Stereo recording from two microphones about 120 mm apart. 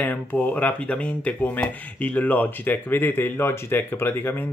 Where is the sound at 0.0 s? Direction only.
15° left (ahead or behind).